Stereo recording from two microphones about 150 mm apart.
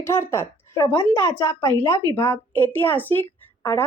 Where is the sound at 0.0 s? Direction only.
15° left (ahead or behind).